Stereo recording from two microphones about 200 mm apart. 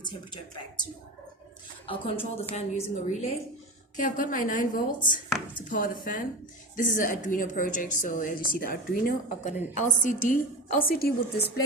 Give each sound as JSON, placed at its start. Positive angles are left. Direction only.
{"t": 1.9, "sound": "a woman's voice", "side_deg": 30}